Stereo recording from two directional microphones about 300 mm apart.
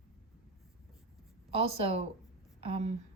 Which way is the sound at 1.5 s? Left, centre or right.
Centre.